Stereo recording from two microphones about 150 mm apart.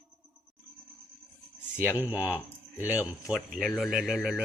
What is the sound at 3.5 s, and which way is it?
Speech, centre (ahead or behind).